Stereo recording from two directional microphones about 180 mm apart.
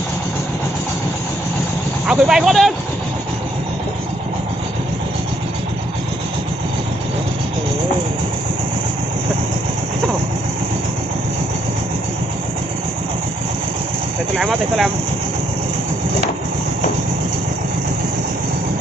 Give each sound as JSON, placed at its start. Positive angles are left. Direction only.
{"t": 2.0, "sound": "speech", "side_deg": -5}
{"t": 14.3, "sound": "speech", "side_deg": 0}